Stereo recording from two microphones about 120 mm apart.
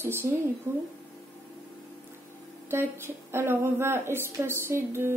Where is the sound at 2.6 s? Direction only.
20° right (ahead or behind).